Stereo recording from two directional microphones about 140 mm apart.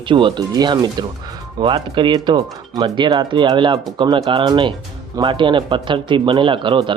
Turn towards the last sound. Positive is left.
turn(degrees=-35)  # may be behind; listen again after turning